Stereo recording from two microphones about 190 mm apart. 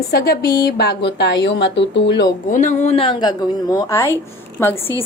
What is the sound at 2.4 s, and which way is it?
A woman's voice, 45° left (ahead or behind).